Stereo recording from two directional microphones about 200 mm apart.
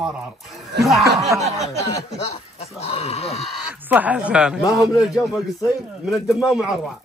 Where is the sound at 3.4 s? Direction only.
5° right (ahead or behind).